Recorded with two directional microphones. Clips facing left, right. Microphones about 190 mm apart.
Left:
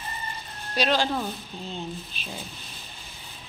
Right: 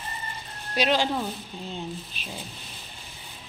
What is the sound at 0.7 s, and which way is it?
Speech, 15° right (ahead or behind).